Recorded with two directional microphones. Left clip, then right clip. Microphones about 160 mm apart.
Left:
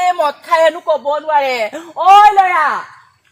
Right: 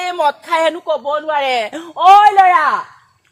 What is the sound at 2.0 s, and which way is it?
Speech, 10° right (ahead or behind).